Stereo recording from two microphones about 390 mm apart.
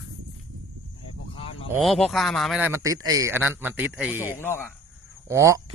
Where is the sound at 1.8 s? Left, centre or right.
Centre.